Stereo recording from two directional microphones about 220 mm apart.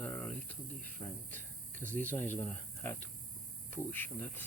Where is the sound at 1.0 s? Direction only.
15° left (ahead or behind).